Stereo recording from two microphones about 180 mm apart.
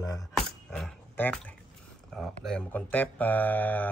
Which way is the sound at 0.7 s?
5° left (ahead or behind).